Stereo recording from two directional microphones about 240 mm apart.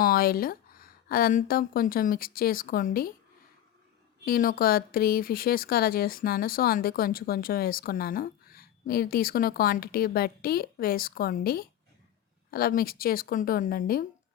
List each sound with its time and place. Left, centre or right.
0.0 s speech: left
4.3 s speech: left